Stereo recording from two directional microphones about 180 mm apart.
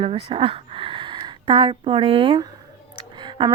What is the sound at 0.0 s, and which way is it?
Speech, 30° right (ahead or behind).